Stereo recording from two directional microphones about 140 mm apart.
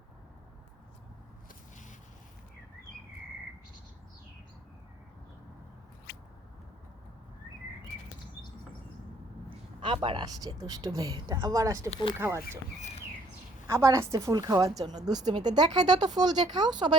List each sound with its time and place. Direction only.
9.5 s speech: 40° right (ahead or behind); by 11.9 s 25° right (ahead or behind)
13.7 s speech: 20° right (ahead or behind)